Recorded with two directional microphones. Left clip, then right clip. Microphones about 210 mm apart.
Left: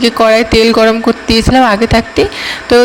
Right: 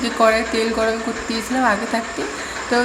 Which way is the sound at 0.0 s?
45° left (ahead or behind).